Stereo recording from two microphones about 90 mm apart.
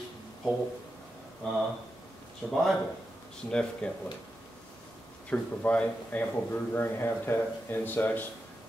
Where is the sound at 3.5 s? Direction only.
10° left (ahead or behind).